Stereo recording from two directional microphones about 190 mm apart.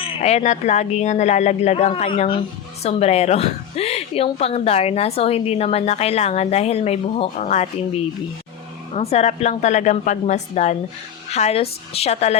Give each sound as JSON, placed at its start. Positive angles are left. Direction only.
{"t": 0.0, "sound": "speech", "side_deg": 35}
{"t": 9.0, "sound": "speech", "side_deg": 35}